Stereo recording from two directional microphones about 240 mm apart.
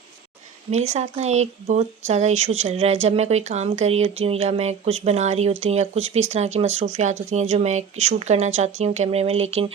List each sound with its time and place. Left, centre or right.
0.7 s speech: right